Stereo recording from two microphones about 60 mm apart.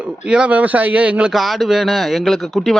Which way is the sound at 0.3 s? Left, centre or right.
Centre.